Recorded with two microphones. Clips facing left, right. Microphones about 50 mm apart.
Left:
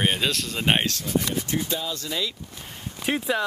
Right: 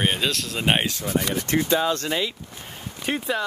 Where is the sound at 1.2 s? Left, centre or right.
Right.